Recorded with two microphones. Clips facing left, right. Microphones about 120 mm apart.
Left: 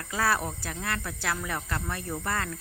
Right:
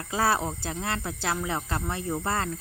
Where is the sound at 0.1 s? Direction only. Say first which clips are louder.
Right 2 dB; 25° right (ahead or behind).